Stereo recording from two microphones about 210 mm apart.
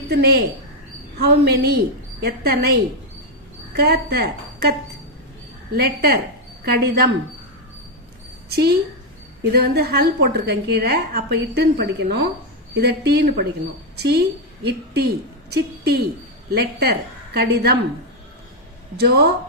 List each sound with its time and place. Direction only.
0.1 s a woman's voice: 50° right (ahead or behind)
3.8 s a woman's voice: 50° right (ahead or behind)
5.7 s a woman's voice: 50° right (ahead or behind)
8.4 s a woman's voice: 50° right (ahead or behind)
18.9 s a woman's voice: 50° right (ahead or behind)